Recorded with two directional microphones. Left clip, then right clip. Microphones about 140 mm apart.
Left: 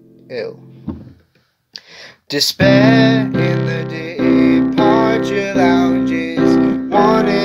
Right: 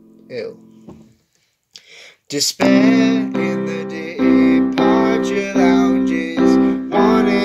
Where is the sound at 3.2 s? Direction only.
20° left (ahead or behind).